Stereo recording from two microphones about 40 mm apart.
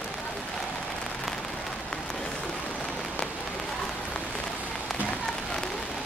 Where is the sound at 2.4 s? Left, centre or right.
Left.